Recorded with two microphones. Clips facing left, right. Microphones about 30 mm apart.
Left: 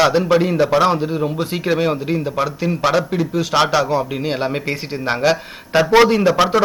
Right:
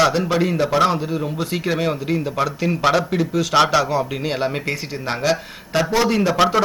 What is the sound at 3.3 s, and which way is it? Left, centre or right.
A man's voice, centre.